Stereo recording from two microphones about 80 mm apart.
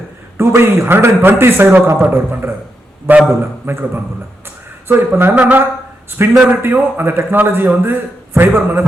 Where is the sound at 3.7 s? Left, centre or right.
Right.